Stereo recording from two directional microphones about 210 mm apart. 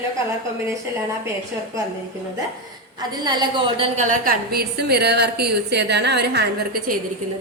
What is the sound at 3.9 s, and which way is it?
A woman's voice, 40° right (ahead or behind).